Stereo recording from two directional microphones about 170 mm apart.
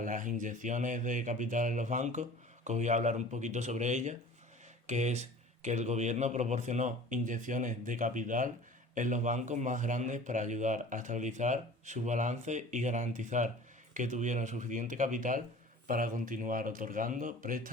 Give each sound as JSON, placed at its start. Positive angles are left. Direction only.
{"t": 0.0, "sound": "a man's voice", "side_deg": -50}